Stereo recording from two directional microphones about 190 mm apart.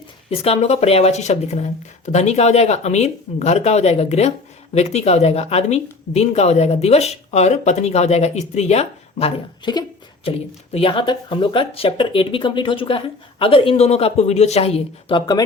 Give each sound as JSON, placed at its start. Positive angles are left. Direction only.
{"t": 0.3, "sound": "speech", "side_deg": 30}